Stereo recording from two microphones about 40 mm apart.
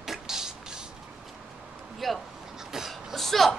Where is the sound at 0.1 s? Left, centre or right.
Centre.